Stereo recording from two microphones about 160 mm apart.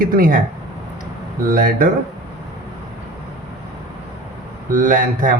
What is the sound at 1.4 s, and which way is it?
Speech, 65° right (ahead or behind).